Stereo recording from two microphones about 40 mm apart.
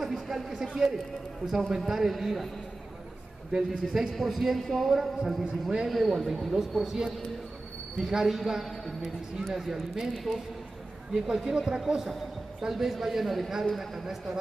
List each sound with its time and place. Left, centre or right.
0.0 s a man's voice: centre
3.5 s speech: centre
4.1 s a man's voice: centre
4.9 s speech: centre
5.9 s a man's voice: centre
8.8 s a man's voice: centre
9.5 s a man's voice: centre
11.2 s a man's voice: centre